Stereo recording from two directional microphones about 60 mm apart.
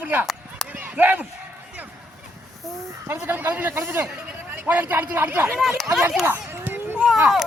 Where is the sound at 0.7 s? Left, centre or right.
Right.